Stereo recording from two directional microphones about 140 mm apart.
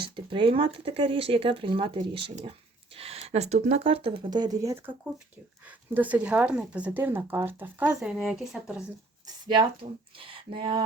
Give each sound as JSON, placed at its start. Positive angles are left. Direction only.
{"t": 0.0, "sound": "speech", "side_deg": -35}
{"t": 5.6, "sound": "speech", "side_deg": -10}
{"t": 9.2, "sound": "a sound", "side_deg": -35}
{"t": 10.2, "sound": "speech", "side_deg": -40}